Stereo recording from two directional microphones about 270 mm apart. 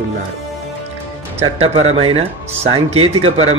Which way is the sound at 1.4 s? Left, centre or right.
Right.